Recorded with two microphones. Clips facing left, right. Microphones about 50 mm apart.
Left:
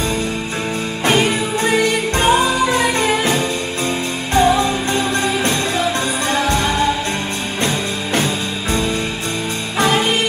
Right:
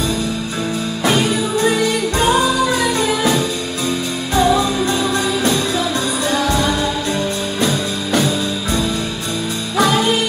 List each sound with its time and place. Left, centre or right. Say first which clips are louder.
1.0 s music: left 1 dB; left
9.8 s music: right 1 dB; left